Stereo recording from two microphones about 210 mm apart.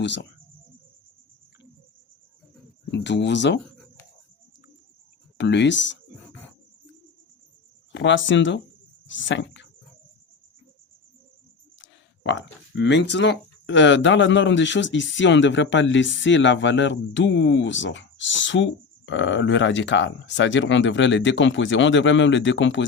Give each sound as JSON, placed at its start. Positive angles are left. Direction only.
{"t": 0.0, "sound": "speech", "side_deg": 55}
{"t": 2.9, "sound": "speech", "side_deg": 55}
{"t": 5.4, "sound": "speech", "side_deg": 55}
{"t": 7.9, "sound": "speech", "side_deg": 60}
{"t": 9.0, "sound": "a sound", "side_deg": 60}
{"t": 11.8, "sound": "speech", "side_deg": 60}